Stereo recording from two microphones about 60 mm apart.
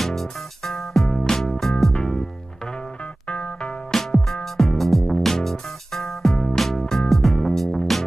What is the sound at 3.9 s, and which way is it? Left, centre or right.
Music, centre.